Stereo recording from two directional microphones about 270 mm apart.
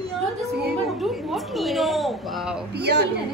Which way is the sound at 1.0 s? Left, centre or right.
Centre.